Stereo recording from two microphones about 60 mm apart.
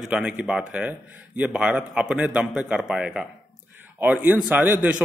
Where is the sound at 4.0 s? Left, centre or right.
Right.